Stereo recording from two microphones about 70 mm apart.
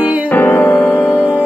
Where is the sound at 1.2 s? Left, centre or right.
Right.